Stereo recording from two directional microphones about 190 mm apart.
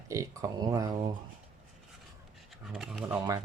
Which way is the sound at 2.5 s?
Centre (ahead or behind).